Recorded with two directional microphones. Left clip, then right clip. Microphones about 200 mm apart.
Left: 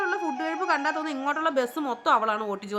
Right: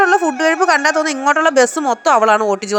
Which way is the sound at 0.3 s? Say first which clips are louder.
Right 13 dB; 40° right (ahead or behind).